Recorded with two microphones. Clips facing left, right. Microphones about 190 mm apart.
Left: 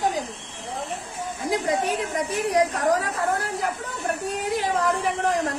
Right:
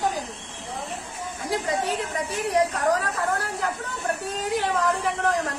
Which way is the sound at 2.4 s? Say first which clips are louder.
Even; 15° left (ahead or behind).